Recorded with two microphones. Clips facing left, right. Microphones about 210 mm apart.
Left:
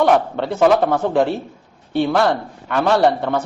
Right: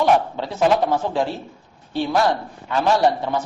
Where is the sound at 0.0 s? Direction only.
60° left (ahead or behind).